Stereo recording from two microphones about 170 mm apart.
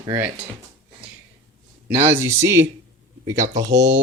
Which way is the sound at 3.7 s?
90° right.